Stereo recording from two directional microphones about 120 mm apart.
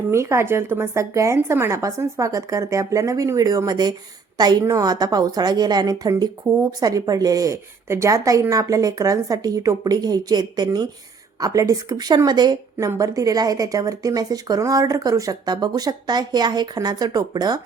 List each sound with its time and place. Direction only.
0.1 s a woman's voice: 20° right (ahead or behind)
12.7 s a woman's voice: 25° right (ahead or behind)